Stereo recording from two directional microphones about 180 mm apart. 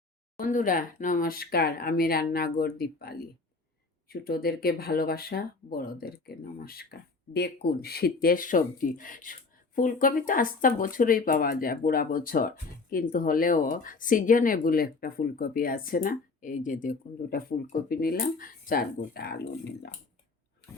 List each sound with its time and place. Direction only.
0.3 s speech: 50° left (ahead or behind)